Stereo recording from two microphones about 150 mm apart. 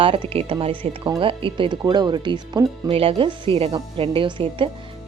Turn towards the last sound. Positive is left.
turn(degrees=-35)  # may be behind; listen again after turning